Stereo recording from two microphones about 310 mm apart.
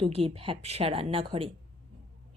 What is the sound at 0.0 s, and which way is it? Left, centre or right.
A woman's voice, centre.